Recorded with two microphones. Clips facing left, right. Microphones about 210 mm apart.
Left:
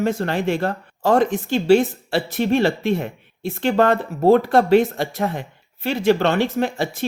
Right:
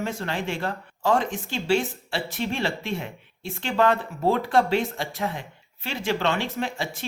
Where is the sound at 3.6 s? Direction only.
45° left (ahead or behind).